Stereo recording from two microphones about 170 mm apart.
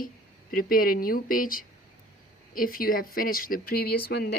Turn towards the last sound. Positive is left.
turn(degrees=65)  # may be behind; listen again after turning